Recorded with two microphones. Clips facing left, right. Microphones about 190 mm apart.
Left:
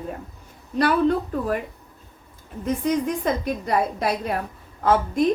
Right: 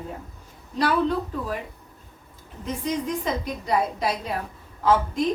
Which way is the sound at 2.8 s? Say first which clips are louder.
Left 3 dB; 55° left (ahead or behind).